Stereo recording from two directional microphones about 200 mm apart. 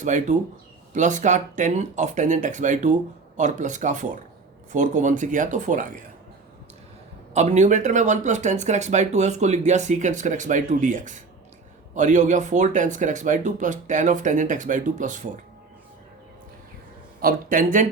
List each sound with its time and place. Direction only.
0.0 s speech: 40° right (ahead or behind)
7.3 s speech: 35° right (ahead or behind)
17.2 s a man's voice: 45° right (ahead or behind)